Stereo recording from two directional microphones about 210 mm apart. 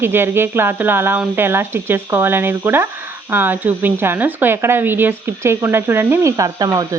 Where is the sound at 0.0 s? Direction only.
10° right (ahead or behind).